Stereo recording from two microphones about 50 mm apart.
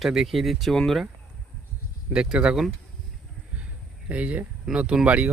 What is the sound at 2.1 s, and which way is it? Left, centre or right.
Speech, centre.